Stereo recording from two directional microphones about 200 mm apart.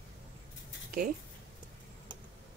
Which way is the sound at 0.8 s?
45° right (ahead or behind).